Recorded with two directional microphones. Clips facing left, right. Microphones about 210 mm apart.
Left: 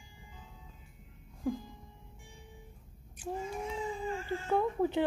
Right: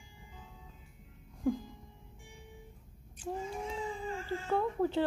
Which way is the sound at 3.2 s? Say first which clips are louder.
Even; 15° left (ahead or behind).